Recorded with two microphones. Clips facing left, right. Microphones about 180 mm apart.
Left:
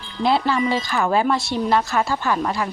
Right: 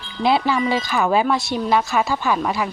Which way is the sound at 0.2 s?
10° right (ahead or behind).